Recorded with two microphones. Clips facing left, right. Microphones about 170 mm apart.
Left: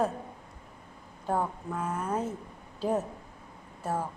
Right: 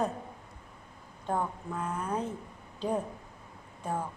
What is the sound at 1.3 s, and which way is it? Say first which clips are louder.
A woman's voice: left 2 dB; 5° left (ahead or behind).